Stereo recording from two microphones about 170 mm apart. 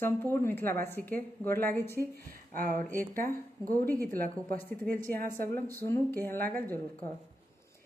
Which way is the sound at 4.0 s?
60° right (ahead or behind).